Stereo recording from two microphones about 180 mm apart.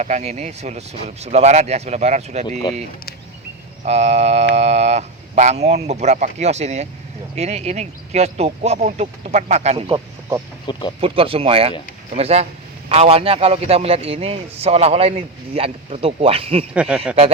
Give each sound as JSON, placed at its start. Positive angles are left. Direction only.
{"t": 0.0, "sound": "a man's voice", "side_deg": -40}
{"t": 3.8, "sound": "a man's voice", "side_deg": -35}
{"t": 9.9, "sound": "a sound", "side_deg": -15}
{"t": 10.7, "sound": "speech", "side_deg": 25}
{"t": 11.0, "sound": "a man's voice", "side_deg": -30}
{"t": 16.7, "sound": "speech", "side_deg": -5}